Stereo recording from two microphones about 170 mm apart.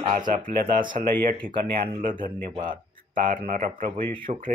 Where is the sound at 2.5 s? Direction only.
30° right (ahead or behind).